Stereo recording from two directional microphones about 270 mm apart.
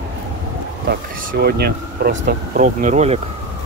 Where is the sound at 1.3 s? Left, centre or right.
Right.